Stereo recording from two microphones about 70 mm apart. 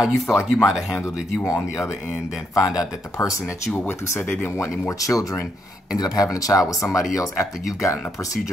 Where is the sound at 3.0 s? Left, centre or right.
Left.